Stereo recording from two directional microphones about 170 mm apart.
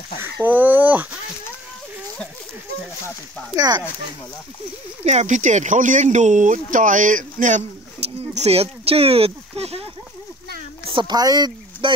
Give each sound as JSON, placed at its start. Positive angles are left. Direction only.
{"t": 0.2, "sound": "a sound", "side_deg": -10}
{"t": 3.5, "sound": "speech", "side_deg": -25}
{"t": 5.0, "sound": "speech", "side_deg": -45}
{"t": 10.9, "sound": "speech", "side_deg": -25}